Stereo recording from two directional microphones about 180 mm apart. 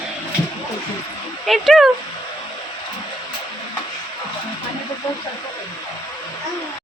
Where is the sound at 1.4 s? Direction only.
Centre (ahead or behind).